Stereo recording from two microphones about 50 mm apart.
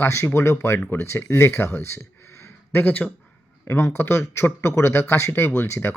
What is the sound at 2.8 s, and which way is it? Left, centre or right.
Speech, left.